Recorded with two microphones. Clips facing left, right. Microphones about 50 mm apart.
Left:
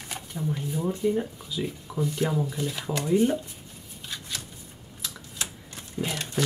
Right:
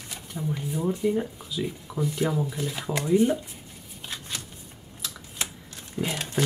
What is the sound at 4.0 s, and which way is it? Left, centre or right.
Shuffling cards, right.